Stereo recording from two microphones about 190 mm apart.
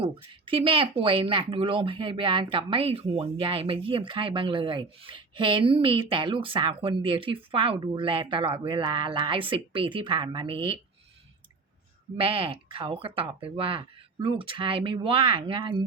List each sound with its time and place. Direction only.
0.0 s speech: 30° right (ahead or behind)
12.1 s speech: 25° right (ahead or behind)